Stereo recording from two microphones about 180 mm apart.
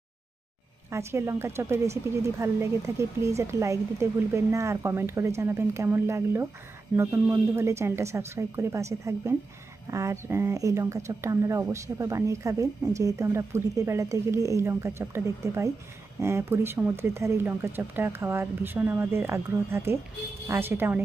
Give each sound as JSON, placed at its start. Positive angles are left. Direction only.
{"t": 0.9, "sound": "a woman's voice", "side_deg": -15}